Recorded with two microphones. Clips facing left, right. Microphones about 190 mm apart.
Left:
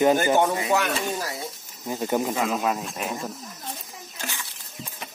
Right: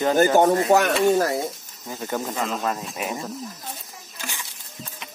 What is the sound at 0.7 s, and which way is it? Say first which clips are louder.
Speech: right 7 dB; 50° right (ahead or behind).